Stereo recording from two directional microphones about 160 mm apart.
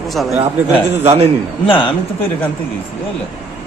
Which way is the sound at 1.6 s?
35° left (ahead or behind).